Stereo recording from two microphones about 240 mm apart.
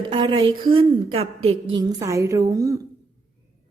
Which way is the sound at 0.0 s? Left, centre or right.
Centre.